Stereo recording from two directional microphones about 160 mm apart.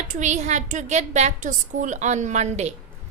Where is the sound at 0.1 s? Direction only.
50° right (ahead or behind).